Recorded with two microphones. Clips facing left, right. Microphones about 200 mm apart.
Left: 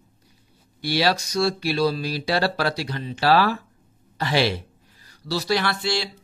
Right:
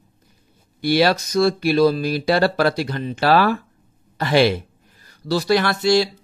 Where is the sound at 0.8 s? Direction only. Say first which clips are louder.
Right 5 dB; 50° right (ahead or behind).